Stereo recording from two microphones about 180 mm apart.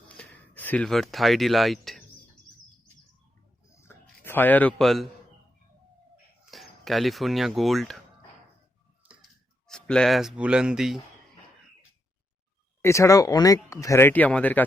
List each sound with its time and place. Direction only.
0.2 s speech: 10° left (ahead or behind)
3.7 s a sound: 15° left (ahead or behind)
6.4 s speech: centre (ahead or behind)
9.6 s speech: 5° left (ahead or behind)
12.8 s speech: 15° left (ahead or behind)